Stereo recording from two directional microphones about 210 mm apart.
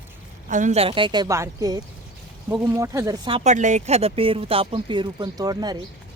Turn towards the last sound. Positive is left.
turn(degrees=-20)  # may be behind; listen again after turning